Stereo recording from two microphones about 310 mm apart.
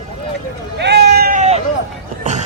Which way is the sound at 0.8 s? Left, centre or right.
Right.